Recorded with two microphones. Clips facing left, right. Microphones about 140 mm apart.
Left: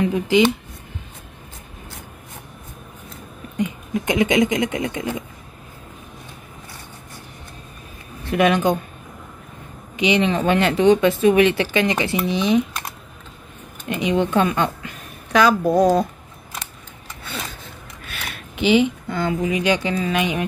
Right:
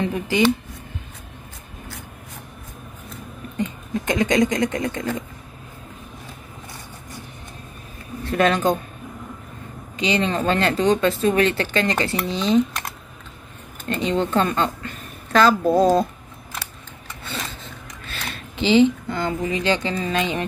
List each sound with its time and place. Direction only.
0.0 s speech: 15° left (ahead or behind)
3.5 s speech: 15° left (ahead or behind)
8.3 s speech: 15° left (ahead or behind)
9.9 s speech: 15° left (ahead or behind)
13.8 s a woman's voice: 15° left (ahead or behind)
17.3 s a sound: 10° left (ahead or behind)
18.2 s speech: 10° left (ahead or behind)